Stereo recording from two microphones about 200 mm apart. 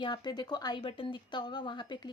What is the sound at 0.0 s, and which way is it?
Speech, 25° left (ahead or behind).